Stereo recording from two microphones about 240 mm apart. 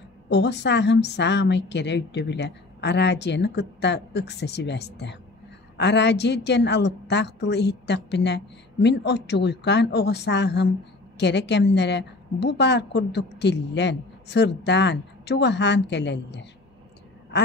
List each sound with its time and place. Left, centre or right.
0.3 s a woman's voice: left